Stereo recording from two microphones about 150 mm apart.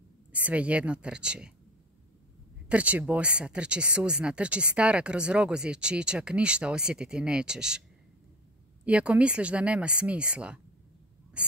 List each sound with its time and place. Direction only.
0.3 s speech: 10° right (ahead or behind)
2.7 s speech: 10° right (ahead or behind)
8.8 s speech: 10° right (ahead or behind)